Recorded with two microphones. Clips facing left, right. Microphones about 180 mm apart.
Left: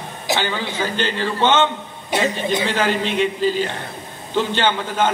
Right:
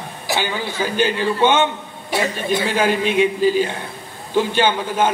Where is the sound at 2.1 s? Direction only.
20° left (ahead or behind).